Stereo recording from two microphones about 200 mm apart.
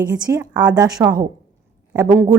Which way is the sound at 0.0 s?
15° right (ahead or behind).